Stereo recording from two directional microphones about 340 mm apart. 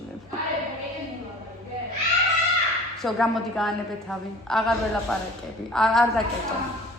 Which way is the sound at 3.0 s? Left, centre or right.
Centre.